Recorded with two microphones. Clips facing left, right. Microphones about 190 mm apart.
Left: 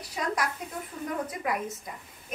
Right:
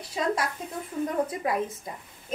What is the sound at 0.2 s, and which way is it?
Speech, 25° right (ahead or behind).